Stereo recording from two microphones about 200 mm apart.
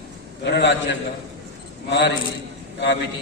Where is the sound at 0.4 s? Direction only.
60° left (ahead or behind).